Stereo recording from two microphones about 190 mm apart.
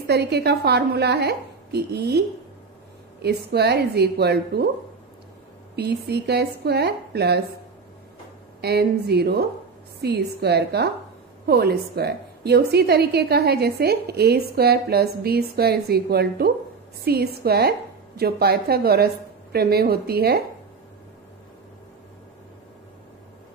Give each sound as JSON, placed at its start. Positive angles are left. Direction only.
{"t": 0.0, "sound": "a woman's voice", "side_deg": -60}
{"t": 5.8, "sound": "a woman's voice", "side_deg": -60}
{"t": 8.5, "sound": "a woman's voice", "side_deg": -60}